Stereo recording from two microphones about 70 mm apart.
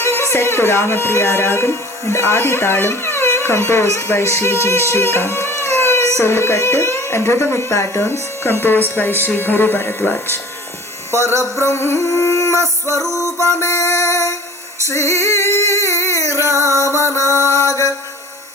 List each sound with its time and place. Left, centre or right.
0.0 s speech: left
4.6 s music: left
8.0 s speech: left
11.5 s music: left
14.8 s a sound: left
16.5 s music: right
16.8 s music: left